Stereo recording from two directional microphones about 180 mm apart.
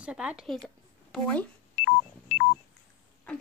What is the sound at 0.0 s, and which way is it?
Speech, 5° right (ahead or behind).